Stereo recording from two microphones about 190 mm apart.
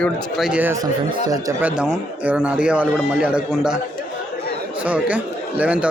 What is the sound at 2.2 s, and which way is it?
Speech, 5° right (ahead or behind).